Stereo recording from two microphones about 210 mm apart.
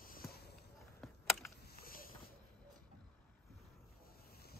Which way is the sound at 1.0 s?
Centre (ahead or behind).